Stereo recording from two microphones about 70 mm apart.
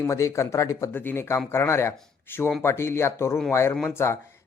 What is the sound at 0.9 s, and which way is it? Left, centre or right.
Speech, left.